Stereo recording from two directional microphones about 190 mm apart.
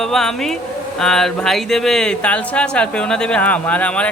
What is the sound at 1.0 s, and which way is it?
Speech, centre (ahead or behind).